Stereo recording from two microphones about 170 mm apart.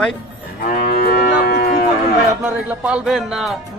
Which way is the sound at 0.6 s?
65° left (ahead or behind).